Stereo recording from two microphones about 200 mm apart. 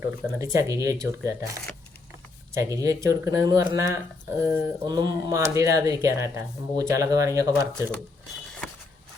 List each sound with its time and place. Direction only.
0.0 s speech: 15° right (ahead or behind)